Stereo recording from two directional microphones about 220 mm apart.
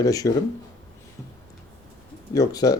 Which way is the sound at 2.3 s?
15° left (ahead or behind).